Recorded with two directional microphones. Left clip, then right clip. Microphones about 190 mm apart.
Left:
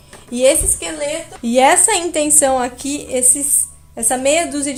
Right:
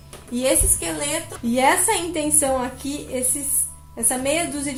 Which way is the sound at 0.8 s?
35° left (ahead or behind).